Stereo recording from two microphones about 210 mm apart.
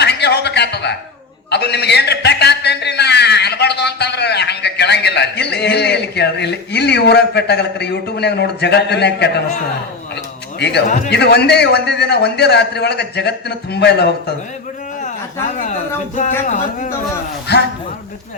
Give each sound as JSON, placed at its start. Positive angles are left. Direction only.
{"t": 0.0, "sound": "a sound", "side_deg": 55}
{"t": 1.5, "sound": "a man's voice", "side_deg": 50}
{"t": 10.6, "sound": "a man's voice", "side_deg": 55}